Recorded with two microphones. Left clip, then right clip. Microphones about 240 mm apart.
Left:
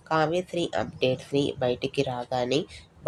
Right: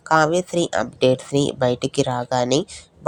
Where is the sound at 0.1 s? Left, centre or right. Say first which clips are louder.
Right 8 dB; right.